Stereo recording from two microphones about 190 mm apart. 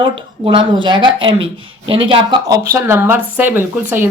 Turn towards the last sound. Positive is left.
turn(degrees=-10)  # may be behind; listen again after turning